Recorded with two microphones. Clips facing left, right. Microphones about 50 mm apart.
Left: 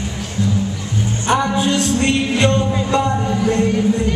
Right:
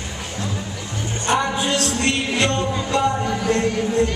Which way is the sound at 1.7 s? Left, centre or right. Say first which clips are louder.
Left 4 dB; left.